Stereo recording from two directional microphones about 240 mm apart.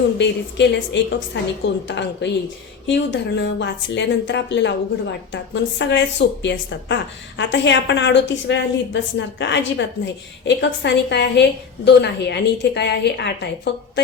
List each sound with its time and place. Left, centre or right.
0.2 s a woman's voice: left
5.8 s a woman's voice: left